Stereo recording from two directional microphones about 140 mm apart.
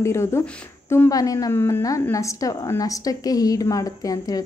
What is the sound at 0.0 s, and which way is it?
A woman's voice, 20° left (ahead or behind).